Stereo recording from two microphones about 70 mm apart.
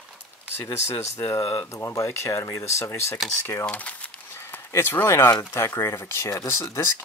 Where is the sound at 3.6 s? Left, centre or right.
Left.